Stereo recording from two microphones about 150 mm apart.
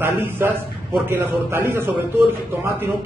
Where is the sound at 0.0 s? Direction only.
15° right (ahead or behind).